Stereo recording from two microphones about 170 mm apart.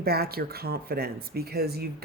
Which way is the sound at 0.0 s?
65° right (ahead or behind).